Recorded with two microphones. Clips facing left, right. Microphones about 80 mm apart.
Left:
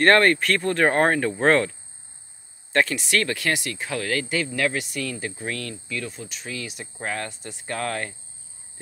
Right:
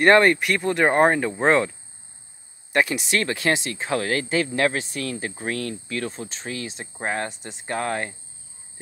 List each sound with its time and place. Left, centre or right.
0.0 s speech: centre